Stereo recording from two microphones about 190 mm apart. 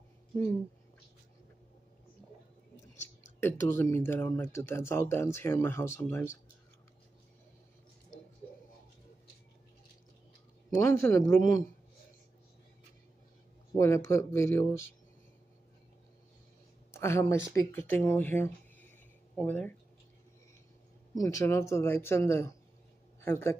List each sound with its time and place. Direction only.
3.3 s speech: 10° left (ahead or behind)
10.9 s speech: 15° left (ahead or behind)
13.7 s speech: 15° left (ahead or behind)
16.9 s speech: 15° left (ahead or behind)
21.1 s speech: 15° left (ahead or behind)